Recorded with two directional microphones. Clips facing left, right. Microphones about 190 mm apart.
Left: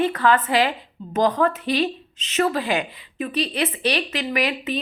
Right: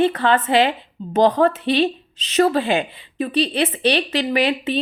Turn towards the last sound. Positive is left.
turn(degrees=-30)  # may be behind; listen again after turning